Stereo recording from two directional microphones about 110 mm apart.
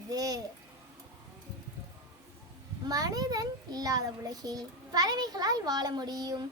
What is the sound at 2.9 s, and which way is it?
A child's voice, 35° right (ahead or behind).